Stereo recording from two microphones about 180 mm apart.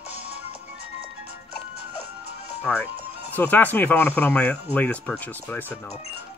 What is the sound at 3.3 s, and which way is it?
Speech, 10° left (ahead or behind).